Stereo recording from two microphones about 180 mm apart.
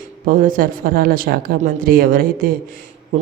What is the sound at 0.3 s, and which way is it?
Speech, 50° right (ahead or behind).